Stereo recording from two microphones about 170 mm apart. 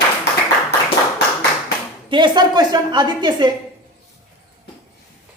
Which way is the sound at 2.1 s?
25° right (ahead or behind).